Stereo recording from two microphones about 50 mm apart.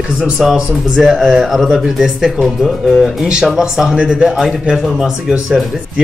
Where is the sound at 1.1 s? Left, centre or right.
Centre.